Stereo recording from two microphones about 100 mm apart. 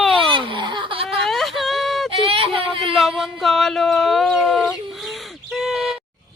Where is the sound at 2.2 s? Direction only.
65° right (ahead or behind).